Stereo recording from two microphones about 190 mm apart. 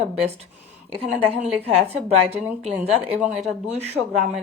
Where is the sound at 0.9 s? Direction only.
30° right (ahead or behind).